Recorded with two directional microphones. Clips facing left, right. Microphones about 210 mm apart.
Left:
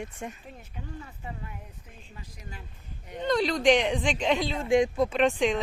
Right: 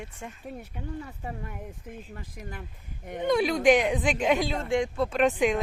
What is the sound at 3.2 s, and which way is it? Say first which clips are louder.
Speech: right 2 dB; 10° right (ahead or behind).